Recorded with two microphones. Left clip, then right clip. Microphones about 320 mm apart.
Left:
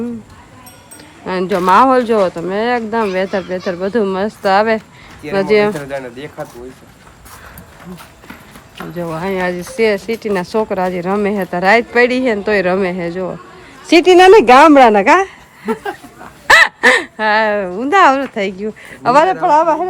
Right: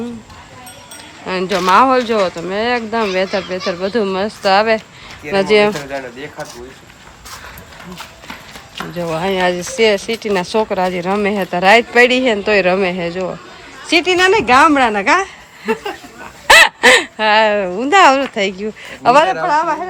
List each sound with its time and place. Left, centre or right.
1.3 s speech: centre
5.9 s speech: left
9.0 s speech: centre
13.8 s speech: centre